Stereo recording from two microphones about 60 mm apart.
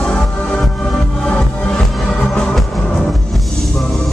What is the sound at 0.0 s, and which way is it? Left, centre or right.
Music, centre.